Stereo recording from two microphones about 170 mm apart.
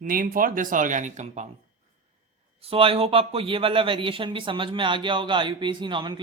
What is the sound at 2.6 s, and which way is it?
Speech, 35° right (ahead or behind).